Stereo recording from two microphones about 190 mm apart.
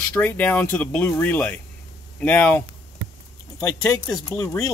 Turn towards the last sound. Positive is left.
turn(degrees=15)  # may be behind; listen again after turning